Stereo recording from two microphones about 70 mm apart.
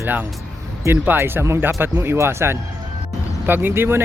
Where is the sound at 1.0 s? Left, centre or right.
Right.